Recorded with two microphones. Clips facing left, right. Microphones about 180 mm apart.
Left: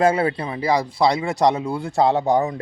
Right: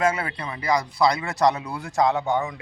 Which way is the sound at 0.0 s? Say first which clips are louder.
Left 6 dB; 30° left (ahead or behind).